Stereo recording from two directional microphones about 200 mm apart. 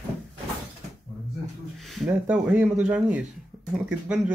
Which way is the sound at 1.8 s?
Centre (ahead or behind).